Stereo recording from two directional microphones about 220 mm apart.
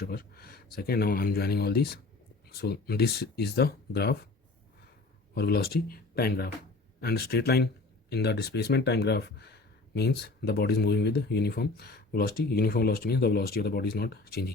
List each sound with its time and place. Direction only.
0.0 s speech: 45° left (ahead or behind)
5.3 s speech: 45° left (ahead or behind)